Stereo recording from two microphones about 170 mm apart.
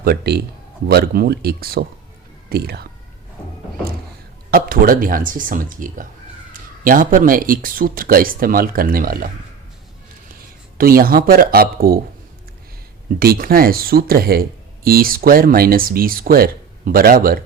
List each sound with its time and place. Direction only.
0.0 s a man's voice: 65° right (ahead or behind)
4.5 s a man's voice: 55° right (ahead or behind)
10.8 s a man's voice: 60° right (ahead or behind)
13.1 s a man's voice: 60° right (ahead or behind)